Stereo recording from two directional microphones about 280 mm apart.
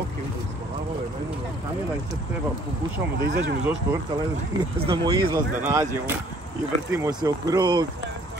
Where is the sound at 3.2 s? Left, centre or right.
Right.